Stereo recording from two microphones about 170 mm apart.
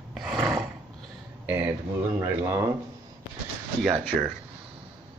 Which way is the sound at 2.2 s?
15° right (ahead or behind).